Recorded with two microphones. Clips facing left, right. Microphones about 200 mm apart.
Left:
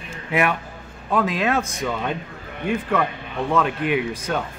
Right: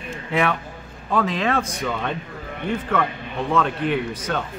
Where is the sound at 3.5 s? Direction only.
5° left (ahead or behind).